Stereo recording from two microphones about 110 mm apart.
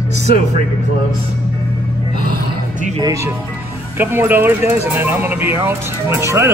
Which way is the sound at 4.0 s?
20° right (ahead or behind).